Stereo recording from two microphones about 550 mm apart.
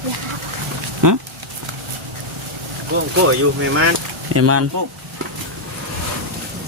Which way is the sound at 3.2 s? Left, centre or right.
Right.